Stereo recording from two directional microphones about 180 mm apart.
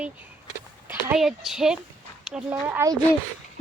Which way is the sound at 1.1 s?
Centre (ahead or behind).